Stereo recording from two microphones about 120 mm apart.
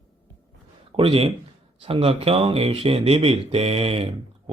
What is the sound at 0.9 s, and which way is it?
Speech, 50° right (ahead or behind).